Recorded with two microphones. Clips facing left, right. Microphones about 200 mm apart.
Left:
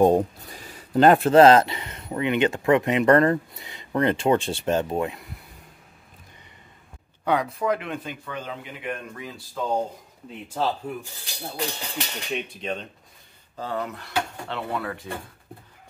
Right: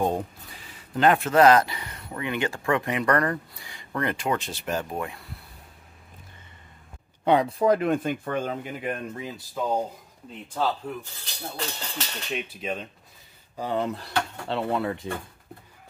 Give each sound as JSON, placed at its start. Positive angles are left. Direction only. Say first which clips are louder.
{"t": 0.0, "sound": "speech", "louder": "left 8 dB", "side_deg": 40}
{"t": 7.2, "sound": "speech", "louder": "right 3 dB", "side_deg": -30}
{"t": 9.6, "sound": "speech", "louder": "even", "side_deg": -10}
{"t": 10.5, "sound": "speech", "louder": "left 1 dB", "side_deg": 10}
{"t": 12.3, "sound": "speech", "louder": "even", "side_deg": 0}
{"t": 13.6, "sound": "speech", "louder": "right 2 dB", "side_deg": -15}
{"t": 13.8, "sound": "speech", "louder": "right 1 dB", "side_deg": -30}